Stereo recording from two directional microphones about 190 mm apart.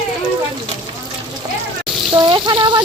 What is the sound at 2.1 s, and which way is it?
Speech, 25° right (ahead or behind).